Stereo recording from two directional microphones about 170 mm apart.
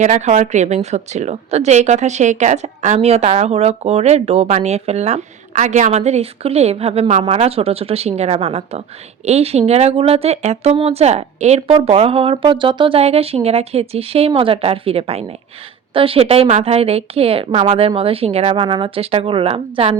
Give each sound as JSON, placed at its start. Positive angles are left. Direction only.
{"t": 0.0, "sound": "a woman's voice", "side_deg": -45}